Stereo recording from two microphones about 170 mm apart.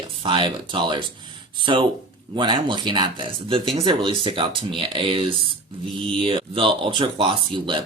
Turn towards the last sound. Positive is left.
turn(degrees=-30)  # may be behind; listen again after turning